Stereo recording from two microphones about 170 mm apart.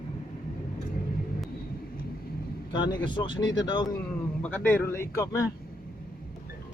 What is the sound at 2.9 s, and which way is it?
Speech, 25° left (ahead or behind).